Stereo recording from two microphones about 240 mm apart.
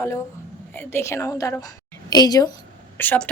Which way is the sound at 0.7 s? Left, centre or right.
Centre.